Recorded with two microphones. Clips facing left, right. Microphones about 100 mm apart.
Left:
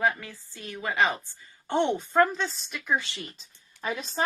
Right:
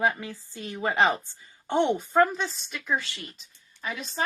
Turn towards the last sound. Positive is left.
turn(degrees=35)  # may be behind; listen again after turning